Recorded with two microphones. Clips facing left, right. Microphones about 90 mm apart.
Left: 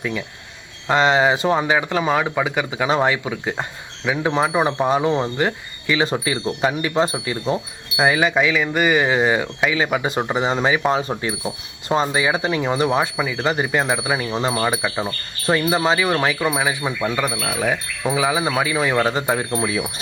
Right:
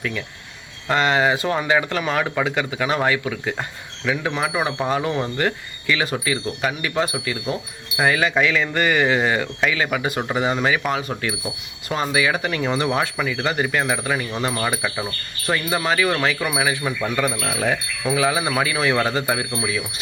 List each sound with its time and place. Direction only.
0.9 s speech: 20° left (ahead or behind)
11.9 s wind chime: 25° left (ahead or behind)
15.0 s speech: 25° left (ahead or behind)
16.6 s wind chime: 15° left (ahead or behind)
19.5 s speech: 40° left (ahead or behind)